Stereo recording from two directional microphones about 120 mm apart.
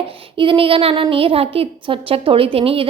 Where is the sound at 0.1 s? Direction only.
45° right (ahead or behind).